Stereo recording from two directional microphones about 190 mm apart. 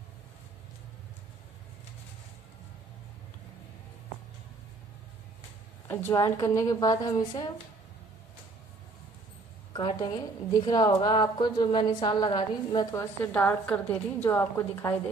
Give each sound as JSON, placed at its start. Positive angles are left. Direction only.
{"t": 5.9, "sound": "a woman's voice", "side_deg": 10}
{"t": 9.8, "sound": "a woman's voice", "side_deg": 25}